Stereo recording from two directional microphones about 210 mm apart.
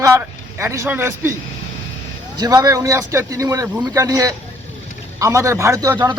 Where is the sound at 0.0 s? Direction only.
10° right (ahead or behind).